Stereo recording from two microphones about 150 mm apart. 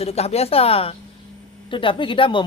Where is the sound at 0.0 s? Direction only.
45° left (ahead or behind).